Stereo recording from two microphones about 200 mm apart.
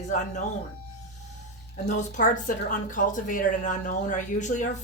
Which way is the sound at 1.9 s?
40° left (ahead or behind).